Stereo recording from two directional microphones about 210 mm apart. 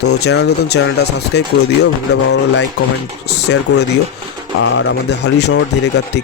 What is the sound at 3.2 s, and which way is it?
Speech, 55° left (ahead or behind).